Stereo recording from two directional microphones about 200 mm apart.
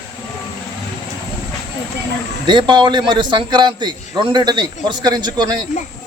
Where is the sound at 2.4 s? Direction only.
20° right (ahead or behind).